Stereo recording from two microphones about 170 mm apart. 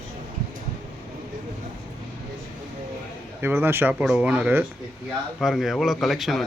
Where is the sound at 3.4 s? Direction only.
15° right (ahead or behind).